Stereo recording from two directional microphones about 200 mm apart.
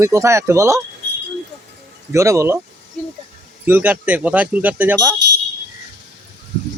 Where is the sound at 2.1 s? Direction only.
15° right (ahead or behind).